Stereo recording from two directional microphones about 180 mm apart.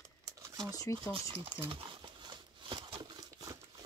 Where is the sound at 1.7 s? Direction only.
30° right (ahead or behind).